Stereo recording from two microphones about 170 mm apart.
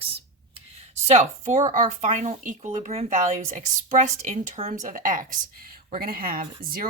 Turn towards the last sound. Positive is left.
turn(degrees=-60)  # may be behind; listen again after turning